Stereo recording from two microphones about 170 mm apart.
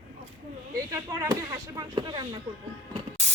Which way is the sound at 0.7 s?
20° right (ahead or behind).